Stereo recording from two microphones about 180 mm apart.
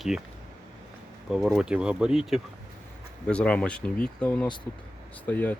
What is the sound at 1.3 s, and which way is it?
Speech, centre (ahead or behind).